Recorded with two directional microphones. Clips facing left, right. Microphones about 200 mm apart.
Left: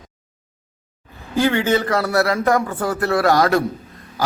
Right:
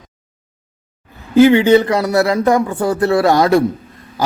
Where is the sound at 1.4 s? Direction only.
15° right (ahead or behind).